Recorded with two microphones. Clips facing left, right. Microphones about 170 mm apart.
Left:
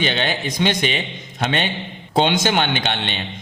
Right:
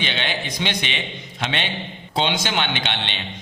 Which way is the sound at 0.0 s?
40° left (ahead or behind).